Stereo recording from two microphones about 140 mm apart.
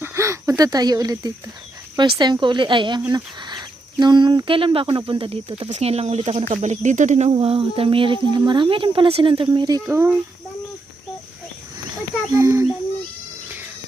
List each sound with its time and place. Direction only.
0.0 s a sound: 20° right (ahead or behind)
2.0 s speech: 30° right (ahead or behind); by 7.3 s 60° right (ahead or behind)
7.3 s a sound: 45° right (ahead or behind)
7.8 s speech: 40° right (ahead or behind)
9.5 s speech: 30° right (ahead or behind)
9.8 s speech: 15° right (ahead or behind)
12.3 s speech: 25° right (ahead or behind)